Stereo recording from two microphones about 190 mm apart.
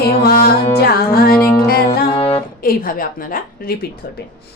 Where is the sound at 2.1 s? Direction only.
30° left (ahead or behind).